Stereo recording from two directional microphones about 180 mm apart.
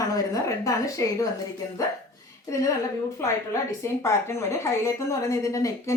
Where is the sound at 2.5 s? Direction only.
15° left (ahead or behind).